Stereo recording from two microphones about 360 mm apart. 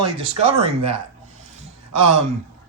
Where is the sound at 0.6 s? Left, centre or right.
Centre.